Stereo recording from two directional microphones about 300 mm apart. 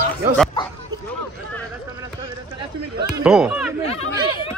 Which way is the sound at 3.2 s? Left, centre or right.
Centre.